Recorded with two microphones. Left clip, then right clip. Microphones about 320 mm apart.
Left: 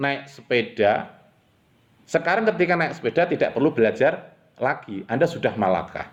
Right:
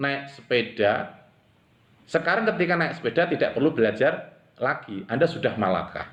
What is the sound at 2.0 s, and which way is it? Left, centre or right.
A man's voice, left.